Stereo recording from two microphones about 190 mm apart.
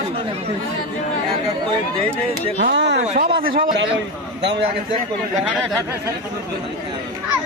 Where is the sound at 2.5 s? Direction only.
65° right (ahead or behind).